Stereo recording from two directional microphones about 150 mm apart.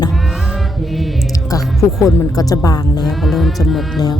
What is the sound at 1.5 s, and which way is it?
Speech, 20° left (ahead or behind).